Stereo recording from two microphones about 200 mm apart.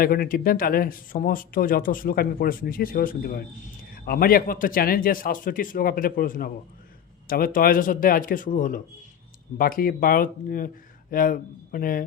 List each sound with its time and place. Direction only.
0.0 s speech: 45° left (ahead or behind)